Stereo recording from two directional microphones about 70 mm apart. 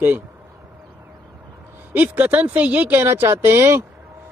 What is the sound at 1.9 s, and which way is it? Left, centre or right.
Speech, right.